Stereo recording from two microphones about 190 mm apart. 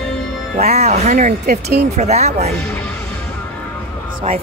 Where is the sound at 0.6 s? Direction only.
35° right (ahead or behind); by 1.9 s 55° right (ahead or behind).